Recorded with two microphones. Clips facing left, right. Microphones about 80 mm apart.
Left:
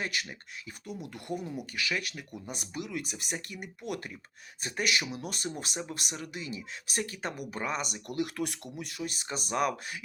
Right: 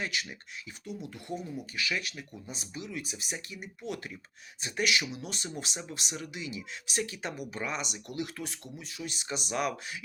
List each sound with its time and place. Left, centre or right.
0.0 s speech: left